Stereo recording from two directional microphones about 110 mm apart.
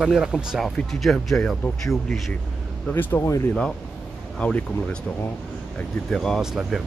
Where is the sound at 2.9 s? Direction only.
20° left (ahead or behind).